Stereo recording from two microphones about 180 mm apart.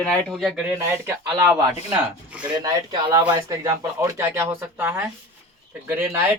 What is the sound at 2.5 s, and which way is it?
A man's voice, 20° right (ahead or behind).